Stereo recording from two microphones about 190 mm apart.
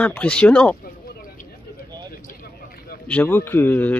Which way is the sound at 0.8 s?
50° left (ahead or behind).